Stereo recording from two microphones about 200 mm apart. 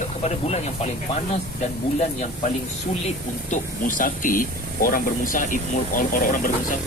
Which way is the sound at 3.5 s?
40° left (ahead or behind).